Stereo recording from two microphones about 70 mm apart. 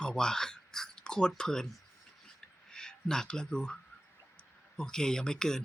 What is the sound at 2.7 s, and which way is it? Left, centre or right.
Speech, centre.